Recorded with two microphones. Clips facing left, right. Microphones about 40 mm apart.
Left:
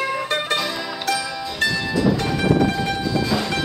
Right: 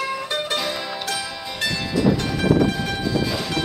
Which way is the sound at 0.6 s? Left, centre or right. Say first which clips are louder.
Left 2 dB; centre.